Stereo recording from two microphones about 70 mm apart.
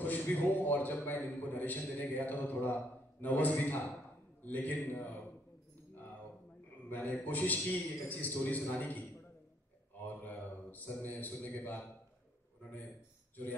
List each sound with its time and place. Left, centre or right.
0.0 s a man's voice: left
6.9 s a man's voice: left
10.0 s a man's voice: left